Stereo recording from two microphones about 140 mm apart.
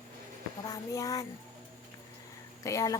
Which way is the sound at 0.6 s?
25° left (ahead or behind).